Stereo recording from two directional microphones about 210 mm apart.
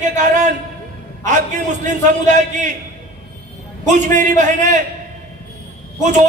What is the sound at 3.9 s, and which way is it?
Speech, 35° right (ahead or behind).